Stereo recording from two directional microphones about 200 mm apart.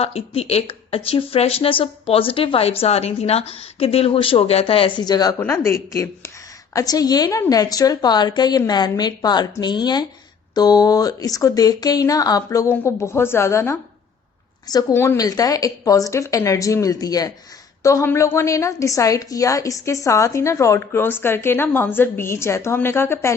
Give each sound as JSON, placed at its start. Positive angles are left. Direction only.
{"t": 0.0, "sound": "a woman's voice", "side_deg": 30}